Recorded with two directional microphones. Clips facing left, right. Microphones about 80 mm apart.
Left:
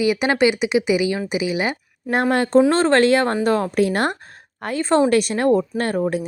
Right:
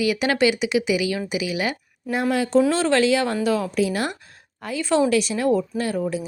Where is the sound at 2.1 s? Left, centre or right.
Left.